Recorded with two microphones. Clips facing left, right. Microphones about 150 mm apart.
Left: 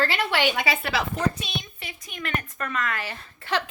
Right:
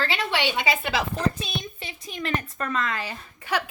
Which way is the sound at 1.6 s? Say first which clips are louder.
Right 3 dB; 30° right (ahead or behind).